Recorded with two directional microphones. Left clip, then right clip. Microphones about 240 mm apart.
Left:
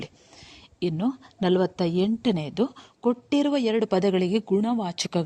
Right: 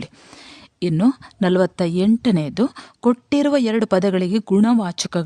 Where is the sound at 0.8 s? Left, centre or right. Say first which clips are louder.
Right 8 dB; right.